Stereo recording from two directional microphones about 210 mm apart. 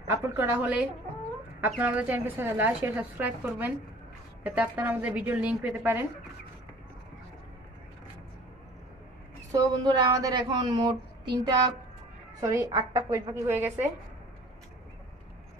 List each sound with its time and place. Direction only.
0.0 s a woman's voice: 10° right (ahead or behind)
9.5 s a woman's voice: 20° right (ahead or behind)